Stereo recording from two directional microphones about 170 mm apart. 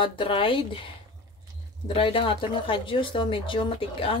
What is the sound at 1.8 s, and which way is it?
A woman's voice, 30° left (ahead or behind).